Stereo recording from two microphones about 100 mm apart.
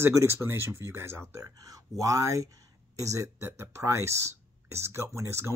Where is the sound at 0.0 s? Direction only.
25° right (ahead or behind).